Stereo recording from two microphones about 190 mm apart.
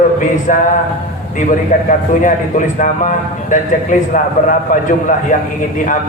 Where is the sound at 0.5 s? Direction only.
45° left (ahead or behind).